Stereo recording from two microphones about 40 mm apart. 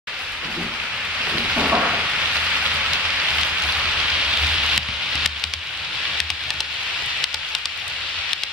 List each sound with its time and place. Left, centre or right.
1.6 s stir: centre
2.6 s rain on surface: right
3.2 s a sound: right
4.4 s rain on surface: right